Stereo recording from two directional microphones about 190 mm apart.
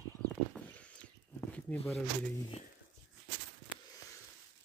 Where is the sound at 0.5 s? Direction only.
5° left (ahead or behind).